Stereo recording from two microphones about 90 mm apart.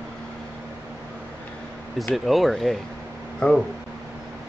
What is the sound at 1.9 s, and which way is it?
Speech, centre (ahead or behind).